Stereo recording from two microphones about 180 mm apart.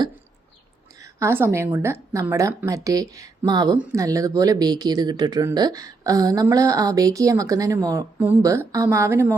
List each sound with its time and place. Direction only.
1.0 s a woman's voice: 15° right (ahead or behind)